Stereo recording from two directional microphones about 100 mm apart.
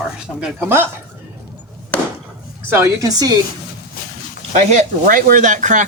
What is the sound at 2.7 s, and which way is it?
Speech, 30° right (ahead or behind).